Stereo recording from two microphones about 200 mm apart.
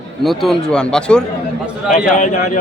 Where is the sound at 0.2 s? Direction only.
Centre (ahead or behind).